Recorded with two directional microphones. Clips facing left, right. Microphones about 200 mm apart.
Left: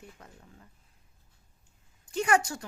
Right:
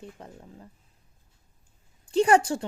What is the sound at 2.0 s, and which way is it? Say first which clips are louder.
Speech: right 6 dB; 30° right (ahead or behind).